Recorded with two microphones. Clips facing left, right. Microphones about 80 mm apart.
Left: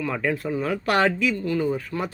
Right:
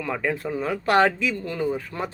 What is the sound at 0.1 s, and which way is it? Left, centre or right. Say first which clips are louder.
Speech: right 3 dB; centre.